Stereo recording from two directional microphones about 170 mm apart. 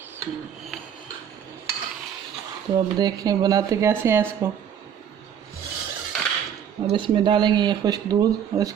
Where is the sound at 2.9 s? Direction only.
25° right (ahead or behind).